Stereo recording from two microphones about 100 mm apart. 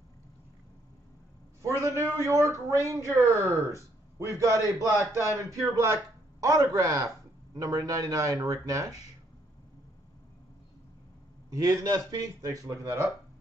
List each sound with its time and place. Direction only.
1.6 s a man's voice: 30° right (ahead or behind)
11.5 s a man's voice: 35° right (ahead or behind)